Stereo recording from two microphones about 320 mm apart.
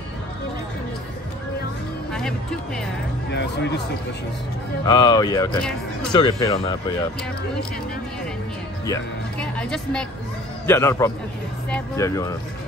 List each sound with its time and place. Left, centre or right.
2.1 s speech: centre
3.3 s speech: left
4.8 s speech: centre
9.4 s speech: centre